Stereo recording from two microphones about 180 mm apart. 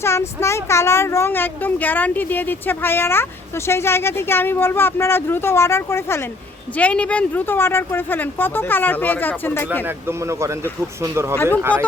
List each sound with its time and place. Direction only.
0.0 s speech: 15° left (ahead or behind)
9.8 s speech: 15° right (ahead or behind)
11.7 s speech: 5° left (ahead or behind)